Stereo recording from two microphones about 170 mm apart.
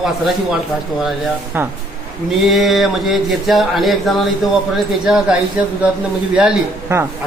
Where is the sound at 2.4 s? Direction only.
Centre (ahead or behind).